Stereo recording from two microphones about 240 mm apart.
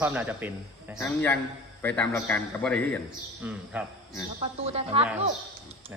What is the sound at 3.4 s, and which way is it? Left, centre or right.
Speech, centre.